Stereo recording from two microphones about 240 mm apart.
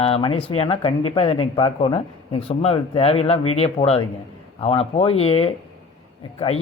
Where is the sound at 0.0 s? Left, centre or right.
Left.